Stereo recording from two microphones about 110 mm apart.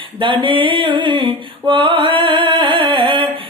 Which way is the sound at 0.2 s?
50° right (ahead or behind).